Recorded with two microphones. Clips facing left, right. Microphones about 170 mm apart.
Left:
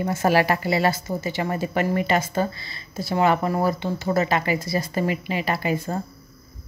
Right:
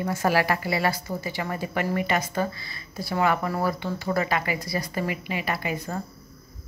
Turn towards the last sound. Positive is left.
turn(degrees=30)  # may be behind; listen again after turning